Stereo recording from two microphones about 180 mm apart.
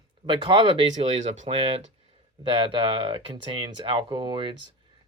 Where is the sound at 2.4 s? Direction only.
30° right (ahead or behind).